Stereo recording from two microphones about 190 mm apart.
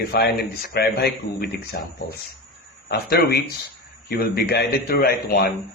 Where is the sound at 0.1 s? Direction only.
55° left (ahead or behind).